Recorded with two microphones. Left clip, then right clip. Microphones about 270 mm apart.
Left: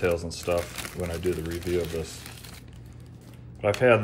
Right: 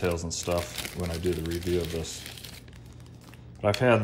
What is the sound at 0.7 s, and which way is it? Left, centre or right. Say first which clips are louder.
Speech: left 1 dB; centre.